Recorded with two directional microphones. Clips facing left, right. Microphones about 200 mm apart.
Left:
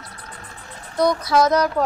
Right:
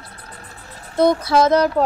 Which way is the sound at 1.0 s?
25° right (ahead or behind).